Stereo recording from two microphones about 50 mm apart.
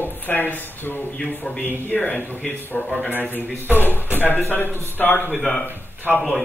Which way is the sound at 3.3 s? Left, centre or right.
Left.